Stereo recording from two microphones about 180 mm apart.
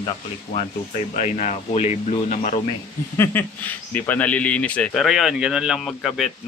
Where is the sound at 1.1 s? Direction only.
40° left (ahead or behind).